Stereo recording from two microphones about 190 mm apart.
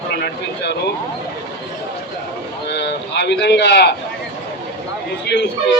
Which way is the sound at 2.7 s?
65° left (ahead or behind).